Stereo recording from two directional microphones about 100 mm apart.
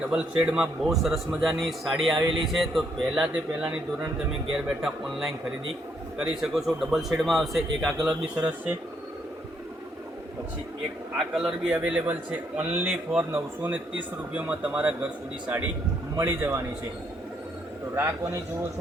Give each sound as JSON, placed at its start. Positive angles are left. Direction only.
{"t": 0.1, "sound": "a man's voice", "side_deg": -10}
{"t": 8.0, "sound": "a man's voice", "side_deg": -15}
{"t": 11.3, "sound": "a man's voice", "side_deg": -10}
{"t": 16.1, "sound": "a man's voice", "side_deg": -25}
{"t": 17.9, "sound": "a man's voice", "side_deg": -30}